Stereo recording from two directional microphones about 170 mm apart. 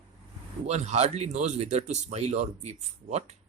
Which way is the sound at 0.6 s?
40° right (ahead or behind).